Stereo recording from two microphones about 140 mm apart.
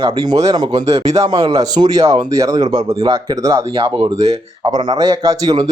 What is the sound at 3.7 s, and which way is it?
Speech, 35° right (ahead or behind).